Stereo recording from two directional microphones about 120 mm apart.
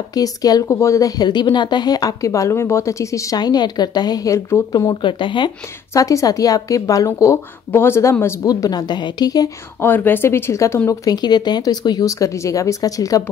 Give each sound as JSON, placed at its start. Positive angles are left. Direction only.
{"t": 0.1, "sound": "speech", "side_deg": 30}
{"t": 4.7, "sound": "speech", "side_deg": 40}
{"t": 5.9, "sound": "speech", "side_deg": 30}
{"t": 9.8, "sound": "speech", "side_deg": 15}
{"t": 10.9, "sound": "speech", "side_deg": 35}